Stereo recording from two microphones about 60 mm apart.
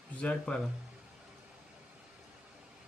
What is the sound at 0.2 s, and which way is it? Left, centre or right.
Speech, centre.